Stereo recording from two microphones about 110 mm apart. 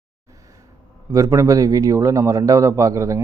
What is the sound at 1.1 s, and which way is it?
Speech, 30° right (ahead or behind).